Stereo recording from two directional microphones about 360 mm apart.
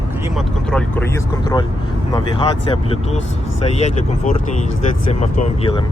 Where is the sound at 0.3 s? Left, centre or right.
Centre.